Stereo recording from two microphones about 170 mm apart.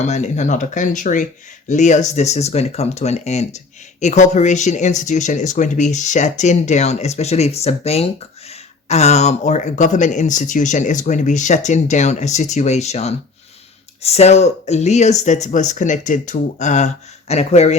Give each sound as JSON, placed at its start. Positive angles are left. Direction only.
{"t": 0.0, "sound": "speech", "side_deg": 45}